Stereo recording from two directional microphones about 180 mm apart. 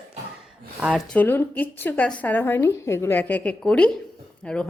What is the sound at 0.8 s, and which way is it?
Speech, 5° right (ahead or behind).